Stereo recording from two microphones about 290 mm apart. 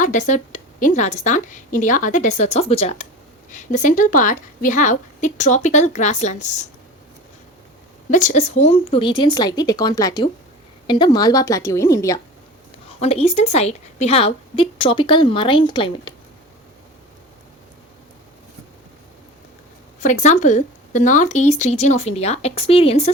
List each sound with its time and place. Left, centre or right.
0.0 s speech: left
8.1 s a woman's voice: left
13.0 s a woman's voice: left
20.0 s speech: left